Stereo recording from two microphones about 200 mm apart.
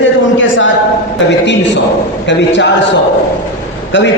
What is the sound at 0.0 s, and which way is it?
Speech, 70° left (ahead or behind).